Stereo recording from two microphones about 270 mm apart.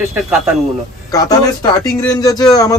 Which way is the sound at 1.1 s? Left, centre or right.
Centre.